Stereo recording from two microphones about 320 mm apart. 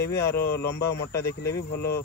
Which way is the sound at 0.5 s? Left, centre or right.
Left.